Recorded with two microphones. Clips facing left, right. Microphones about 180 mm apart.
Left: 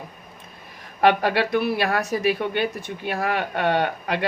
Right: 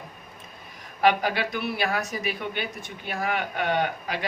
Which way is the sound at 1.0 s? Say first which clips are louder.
Left 4 dB; 65° left (ahead or behind).